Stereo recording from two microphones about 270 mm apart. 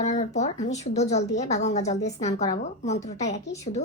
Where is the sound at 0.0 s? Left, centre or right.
Left.